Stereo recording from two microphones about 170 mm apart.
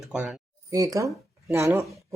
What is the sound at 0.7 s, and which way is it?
Speech, 20° right (ahead or behind).